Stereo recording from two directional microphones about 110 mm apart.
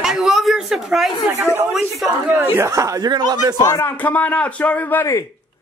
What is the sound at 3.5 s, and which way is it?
Speech, 30° left (ahead or behind).